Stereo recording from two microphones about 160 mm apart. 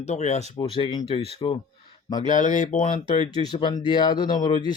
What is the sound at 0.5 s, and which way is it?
Speech, 30° left (ahead or behind).